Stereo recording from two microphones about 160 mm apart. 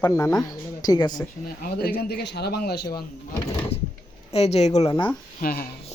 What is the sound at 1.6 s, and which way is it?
Speech, 70° left (ahead or behind).